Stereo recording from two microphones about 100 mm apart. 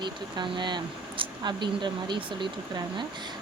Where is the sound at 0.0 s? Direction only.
50° right (ahead or behind).